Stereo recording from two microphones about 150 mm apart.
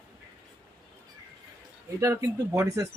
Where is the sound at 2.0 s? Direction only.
20° right (ahead or behind).